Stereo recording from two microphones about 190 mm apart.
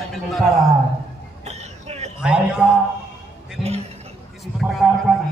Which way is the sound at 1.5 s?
35° right (ahead or behind).